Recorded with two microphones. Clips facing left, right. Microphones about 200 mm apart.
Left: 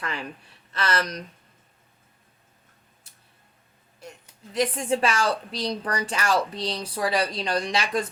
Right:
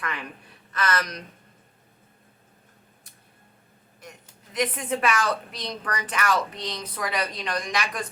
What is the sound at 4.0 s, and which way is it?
A woman's voice, 30° left (ahead or behind).